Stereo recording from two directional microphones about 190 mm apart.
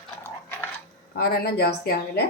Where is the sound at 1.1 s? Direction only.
55° left (ahead or behind).